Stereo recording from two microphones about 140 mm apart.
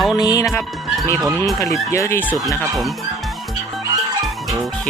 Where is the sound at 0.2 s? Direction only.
25° left (ahead or behind).